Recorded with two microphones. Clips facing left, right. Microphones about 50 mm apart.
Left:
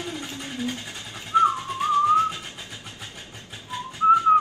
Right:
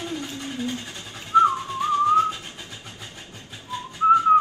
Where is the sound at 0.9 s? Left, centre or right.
Left.